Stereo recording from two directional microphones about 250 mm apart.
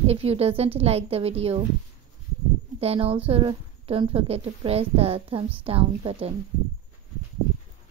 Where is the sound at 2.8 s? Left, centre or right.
Right.